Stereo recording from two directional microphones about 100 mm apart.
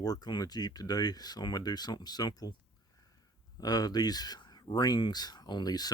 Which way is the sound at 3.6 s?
40° left (ahead or behind).